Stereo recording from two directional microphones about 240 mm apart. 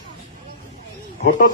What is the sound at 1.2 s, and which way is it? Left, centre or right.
Speech, left.